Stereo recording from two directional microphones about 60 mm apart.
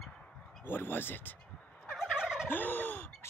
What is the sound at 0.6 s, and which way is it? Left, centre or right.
Speech, left.